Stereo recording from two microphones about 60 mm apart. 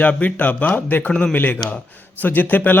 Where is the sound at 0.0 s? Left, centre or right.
Left.